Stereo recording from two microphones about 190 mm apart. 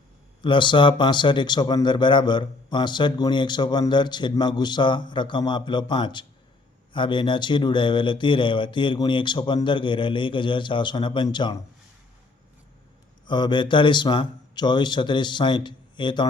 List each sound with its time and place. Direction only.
0.4 s a man's voice: 25° left (ahead or behind)
13.2 s a man's voice: 25° left (ahead or behind)